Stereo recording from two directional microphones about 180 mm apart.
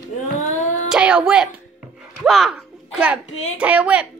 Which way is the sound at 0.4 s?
45° left (ahead or behind).